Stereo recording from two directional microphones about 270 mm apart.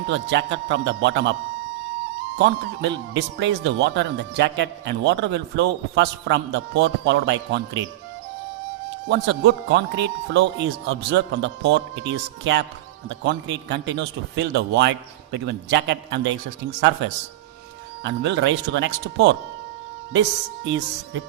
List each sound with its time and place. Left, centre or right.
0.1 s speech: right
2.4 s speech: right
9.0 s speech: right
18.0 s speech: right